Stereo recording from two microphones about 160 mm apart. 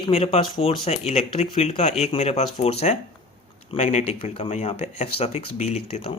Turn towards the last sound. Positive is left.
turn(degrees=40)  # may be behind; listen again after turning